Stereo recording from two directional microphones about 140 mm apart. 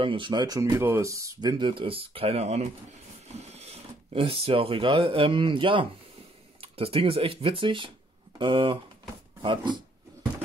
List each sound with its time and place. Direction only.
0.0 s speech: 35° right (ahead or behind)